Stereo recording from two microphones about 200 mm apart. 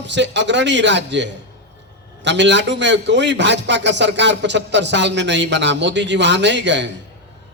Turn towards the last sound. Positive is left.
turn(degrees=-65)  # may be behind; listen again after turning